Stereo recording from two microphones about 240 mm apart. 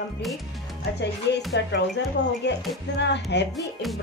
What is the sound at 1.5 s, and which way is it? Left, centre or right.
Speech, left.